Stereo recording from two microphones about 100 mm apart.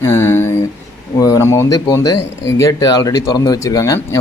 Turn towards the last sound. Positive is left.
turn(degrees=35)  # may be behind; listen again after turning